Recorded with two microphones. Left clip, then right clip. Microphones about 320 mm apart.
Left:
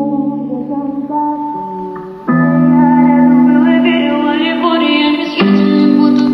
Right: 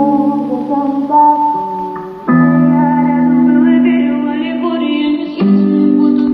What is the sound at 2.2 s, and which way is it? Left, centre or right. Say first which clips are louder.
Music: right 1 dB; centre.